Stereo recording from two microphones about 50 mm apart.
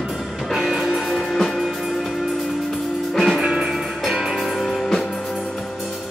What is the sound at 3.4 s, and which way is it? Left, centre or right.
Music, centre.